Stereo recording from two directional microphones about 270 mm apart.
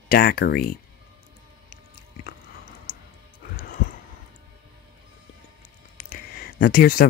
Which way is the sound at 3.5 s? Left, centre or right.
Left.